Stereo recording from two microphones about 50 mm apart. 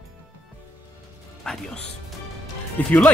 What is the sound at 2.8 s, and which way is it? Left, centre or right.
Speech, left.